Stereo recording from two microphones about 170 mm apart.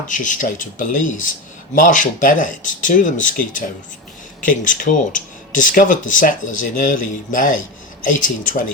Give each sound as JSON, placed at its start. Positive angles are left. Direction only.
{"t": 0.1, "sound": "speech", "side_deg": 50}